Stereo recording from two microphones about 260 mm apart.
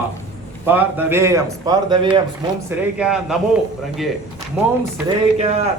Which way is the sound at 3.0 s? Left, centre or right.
Centre.